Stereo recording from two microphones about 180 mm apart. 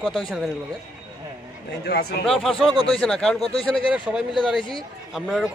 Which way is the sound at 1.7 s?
60° left (ahead or behind).